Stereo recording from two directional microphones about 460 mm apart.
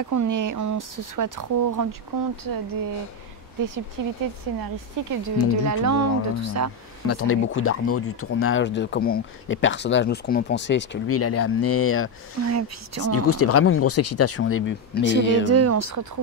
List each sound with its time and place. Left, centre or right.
0.0 s speech: right
5.2 s speech: right
7.1 s speech: left
12.4 s speech: right
13.1 s speech: left
15.4 s speech: right